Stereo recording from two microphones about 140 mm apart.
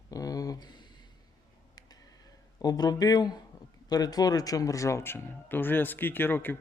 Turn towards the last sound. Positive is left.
turn(degrees=15)  # may be behind; listen again after turning